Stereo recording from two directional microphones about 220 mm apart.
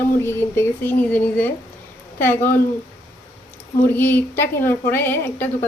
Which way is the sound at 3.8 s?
10° left (ahead or behind).